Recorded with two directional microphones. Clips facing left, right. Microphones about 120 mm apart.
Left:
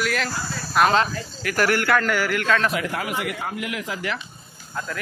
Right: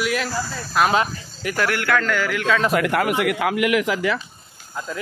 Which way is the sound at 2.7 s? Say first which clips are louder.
Right 7 dB; 60° right (ahead or behind).